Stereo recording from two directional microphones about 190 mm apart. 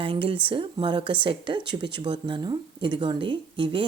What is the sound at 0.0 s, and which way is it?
A woman's voice, 25° right (ahead or behind).